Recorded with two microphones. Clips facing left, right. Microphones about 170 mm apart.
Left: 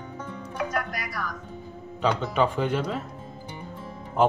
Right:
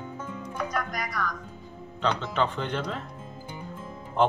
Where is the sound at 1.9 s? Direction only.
10° left (ahead or behind).